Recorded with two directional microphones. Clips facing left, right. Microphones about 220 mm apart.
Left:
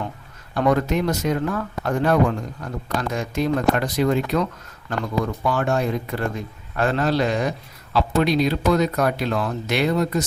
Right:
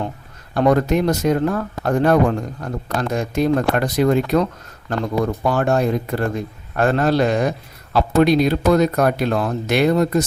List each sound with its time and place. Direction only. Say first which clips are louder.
0.5 s speech: right 4 dB; 40° right (ahead or behind)